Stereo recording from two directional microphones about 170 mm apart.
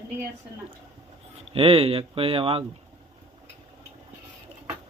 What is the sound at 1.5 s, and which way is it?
Speech, 35° right (ahead or behind).